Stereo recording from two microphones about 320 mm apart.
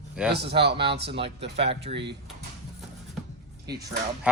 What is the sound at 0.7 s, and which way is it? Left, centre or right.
Speech, centre.